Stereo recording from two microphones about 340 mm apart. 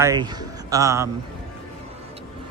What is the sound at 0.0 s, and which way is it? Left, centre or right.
Speech, centre.